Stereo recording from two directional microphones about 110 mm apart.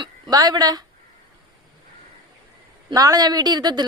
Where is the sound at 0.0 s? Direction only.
40° right (ahead or behind).